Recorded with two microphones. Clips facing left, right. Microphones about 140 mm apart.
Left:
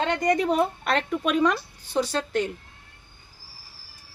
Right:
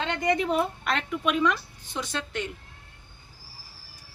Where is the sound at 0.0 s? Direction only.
40° left (ahead or behind).